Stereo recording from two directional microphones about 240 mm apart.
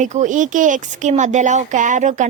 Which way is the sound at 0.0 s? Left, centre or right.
Right.